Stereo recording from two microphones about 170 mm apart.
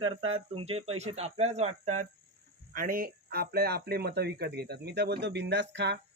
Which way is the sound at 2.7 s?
55° right (ahead or behind).